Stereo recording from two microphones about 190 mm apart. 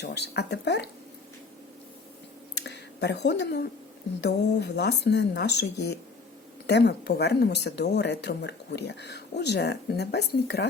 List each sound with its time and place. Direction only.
0.0 s speech: 60° left (ahead or behind)
2.6 s speech: 65° left (ahead or behind)